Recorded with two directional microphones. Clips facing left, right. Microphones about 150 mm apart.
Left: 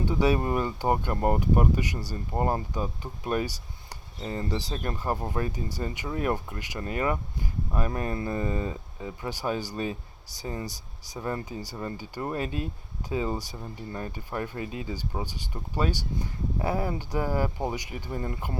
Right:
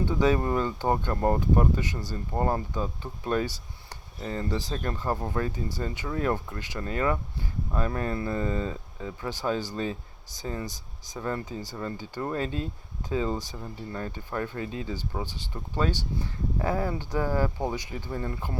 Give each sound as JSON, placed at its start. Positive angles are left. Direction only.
{"t": 0.0, "sound": "speech", "side_deg": 15}